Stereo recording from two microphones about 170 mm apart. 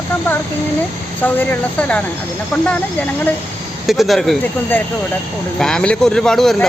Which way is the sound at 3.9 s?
Centre (ahead or behind).